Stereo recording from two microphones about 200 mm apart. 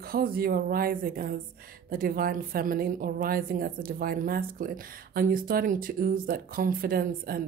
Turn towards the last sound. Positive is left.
turn(degrees=-45)  # may be behind; listen again after turning